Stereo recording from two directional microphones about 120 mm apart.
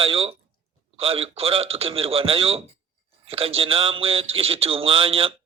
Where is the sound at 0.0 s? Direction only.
50° right (ahead or behind).